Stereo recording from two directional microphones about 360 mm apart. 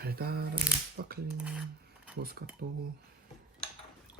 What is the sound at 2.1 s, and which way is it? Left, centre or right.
Speech, right.